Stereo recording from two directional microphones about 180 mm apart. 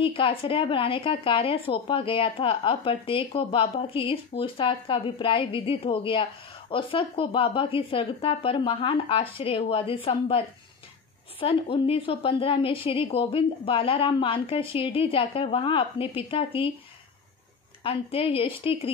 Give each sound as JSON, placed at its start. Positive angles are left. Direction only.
{"t": 0.0, "sound": "a woman's voice", "side_deg": 30}
{"t": 17.8, "sound": "a woman's voice", "side_deg": 30}